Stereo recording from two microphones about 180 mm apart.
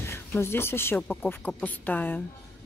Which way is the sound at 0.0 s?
15° left (ahead or behind).